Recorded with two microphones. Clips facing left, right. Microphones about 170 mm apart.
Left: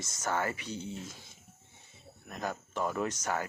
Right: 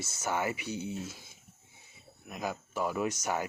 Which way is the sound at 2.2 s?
10° right (ahead or behind).